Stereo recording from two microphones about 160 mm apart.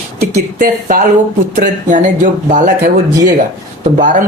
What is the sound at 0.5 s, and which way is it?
Speech, 55° right (ahead or behind).